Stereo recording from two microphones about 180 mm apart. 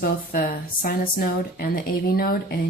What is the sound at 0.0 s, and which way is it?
Speech, 55° left (ahead or behind).